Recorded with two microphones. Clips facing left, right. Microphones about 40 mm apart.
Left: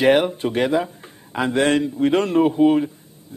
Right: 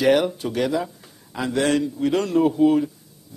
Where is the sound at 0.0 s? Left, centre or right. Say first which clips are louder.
Left 2 dB; left.